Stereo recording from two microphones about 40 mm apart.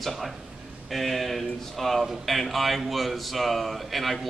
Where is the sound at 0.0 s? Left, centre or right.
Centre.